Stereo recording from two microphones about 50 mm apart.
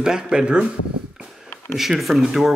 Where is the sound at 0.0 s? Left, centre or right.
Centre.